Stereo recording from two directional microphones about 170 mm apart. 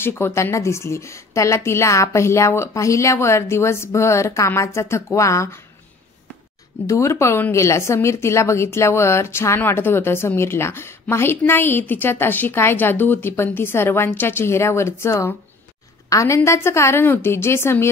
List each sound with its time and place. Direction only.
0.0 s speech: 15° left (ahead or behind)
6.9 s speech: 15° left (ahead or behind)